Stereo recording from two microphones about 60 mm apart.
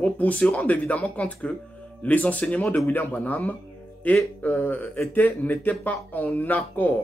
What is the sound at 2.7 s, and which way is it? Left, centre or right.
Speech, left.